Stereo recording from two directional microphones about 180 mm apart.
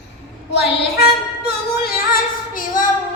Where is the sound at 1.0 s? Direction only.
60° left (ahead or behind).